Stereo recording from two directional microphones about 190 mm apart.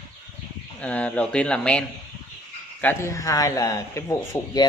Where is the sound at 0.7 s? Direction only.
5° left (ahead or behind).